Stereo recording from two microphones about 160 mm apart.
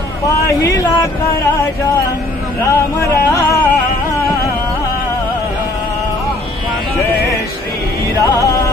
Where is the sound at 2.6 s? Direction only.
20° left (ahead or behind).